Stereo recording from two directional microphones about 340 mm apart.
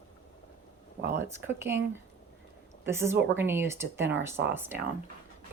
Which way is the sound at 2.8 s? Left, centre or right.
Centre.